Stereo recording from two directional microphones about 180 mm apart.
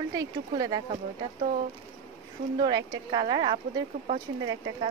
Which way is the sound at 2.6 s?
20° right (ahead or behind).